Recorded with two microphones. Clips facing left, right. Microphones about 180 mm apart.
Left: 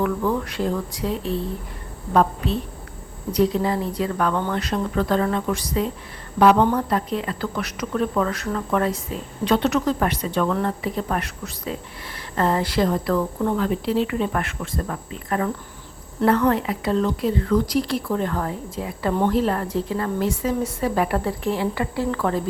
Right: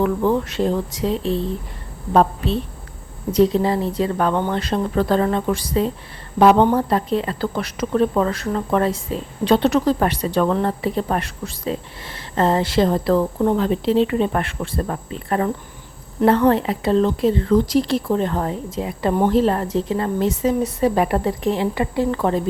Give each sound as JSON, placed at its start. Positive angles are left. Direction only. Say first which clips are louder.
{"t": 0.0, "sound": "speech", "louder": "right 4 dB", "side_deg": -25}
{"t": 3.3, "sound": "speech", "louder": "right 4 dB", "side_deg": -25}